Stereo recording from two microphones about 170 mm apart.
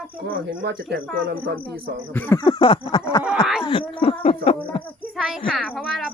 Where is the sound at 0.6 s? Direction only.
70° right (ahead or behind).